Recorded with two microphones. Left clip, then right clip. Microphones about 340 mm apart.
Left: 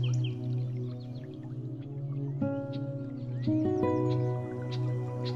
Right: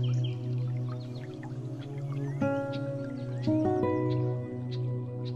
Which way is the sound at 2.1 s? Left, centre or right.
Right.